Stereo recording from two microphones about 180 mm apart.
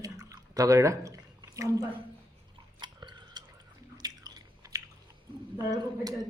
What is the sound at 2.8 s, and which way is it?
Chewing, 25° right (ahead or behind).